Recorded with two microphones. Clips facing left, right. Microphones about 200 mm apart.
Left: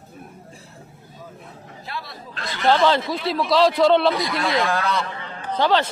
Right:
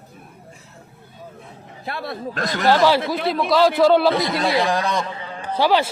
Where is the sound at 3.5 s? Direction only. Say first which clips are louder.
Right 1 dB; centre (ahead or behind).